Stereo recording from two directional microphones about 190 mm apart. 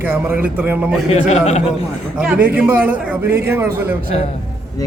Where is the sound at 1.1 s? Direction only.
35° left (ahead or behind).